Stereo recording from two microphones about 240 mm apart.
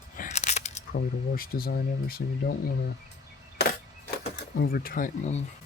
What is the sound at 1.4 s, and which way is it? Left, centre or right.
Speech, left.